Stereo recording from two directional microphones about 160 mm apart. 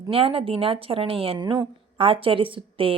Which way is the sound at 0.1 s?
35° right (ahead or behind).